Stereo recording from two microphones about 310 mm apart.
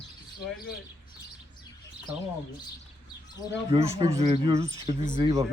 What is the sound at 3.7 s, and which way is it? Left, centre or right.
Speech, centre.